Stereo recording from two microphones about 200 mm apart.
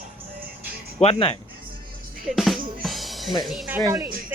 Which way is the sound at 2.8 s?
Centre (ahead or behind).